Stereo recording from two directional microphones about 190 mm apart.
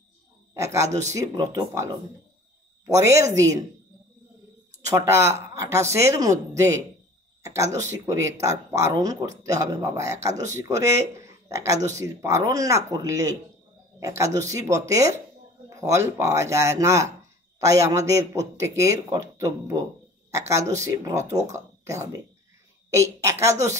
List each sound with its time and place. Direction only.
0.6 s a man's voice: 15° right (ahead or behind)
4.8 s a man's voice: 15° right (ahead or behind)
22.8 s a man's voice: 15° right (ahead or behind)